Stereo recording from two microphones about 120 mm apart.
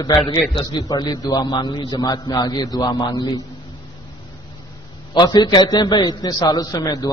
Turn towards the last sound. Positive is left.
turn(degrees=30)  # may be behind; listen again after turning